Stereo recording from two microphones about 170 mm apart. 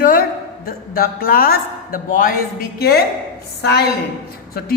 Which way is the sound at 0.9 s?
60° left (ahead or behind).